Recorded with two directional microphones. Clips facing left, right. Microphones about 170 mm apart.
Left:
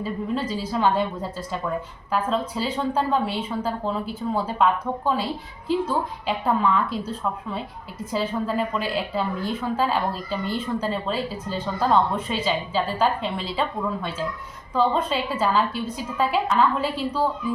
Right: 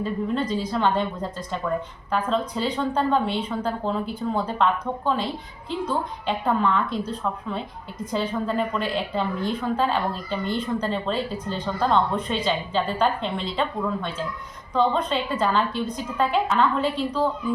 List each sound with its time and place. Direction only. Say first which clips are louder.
0.0 s a woman's voice: right 1 dB; 5° left (ahead or behind)